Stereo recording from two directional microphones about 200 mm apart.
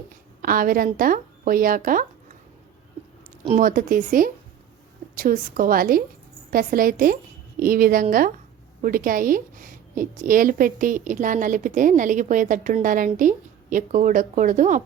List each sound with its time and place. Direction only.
0.1 s a woman's voice: 45° right (ahead or behind)
3.6 s a woman's voice: 45° right (ahead or behind)